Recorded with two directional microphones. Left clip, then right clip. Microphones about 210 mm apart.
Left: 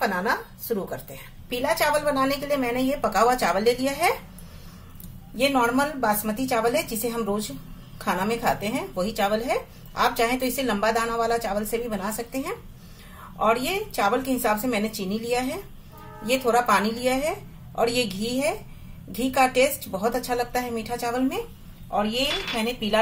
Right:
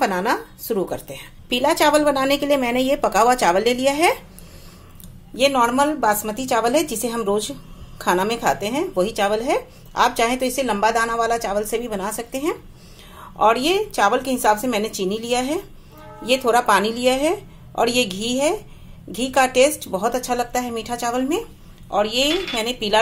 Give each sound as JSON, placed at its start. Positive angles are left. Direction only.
{"t": 0.0, "sound": "speech", "side_deg": -45}
{"t": 5.4, "sound": "speech", "side_deg": -35}